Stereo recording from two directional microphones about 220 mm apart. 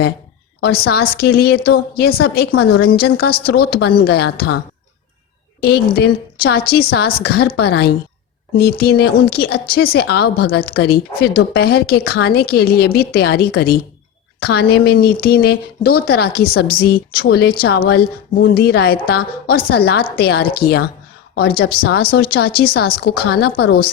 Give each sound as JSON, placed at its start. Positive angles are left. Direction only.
{"t": 0.6, "sound": "a woman's voice", "side_deg": 45}